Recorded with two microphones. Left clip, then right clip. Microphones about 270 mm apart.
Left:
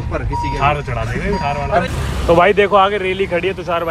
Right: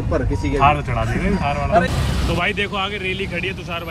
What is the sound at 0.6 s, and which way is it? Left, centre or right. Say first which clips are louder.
Speech: right 2 dB; centre.